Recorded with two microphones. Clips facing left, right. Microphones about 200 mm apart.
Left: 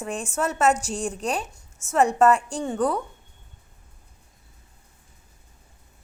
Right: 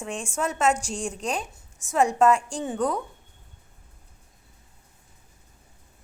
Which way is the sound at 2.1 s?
5° left (ahead or behind).